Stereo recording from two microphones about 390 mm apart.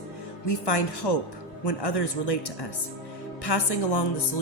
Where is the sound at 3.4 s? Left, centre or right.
Left.